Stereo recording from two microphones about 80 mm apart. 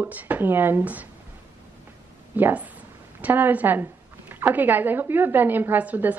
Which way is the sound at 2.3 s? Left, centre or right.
Right.